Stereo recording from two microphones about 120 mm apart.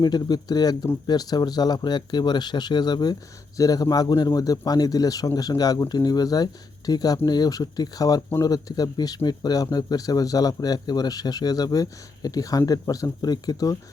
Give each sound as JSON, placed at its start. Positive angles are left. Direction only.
{"t": 0.0, "sound": "speech", "side_deg": 35}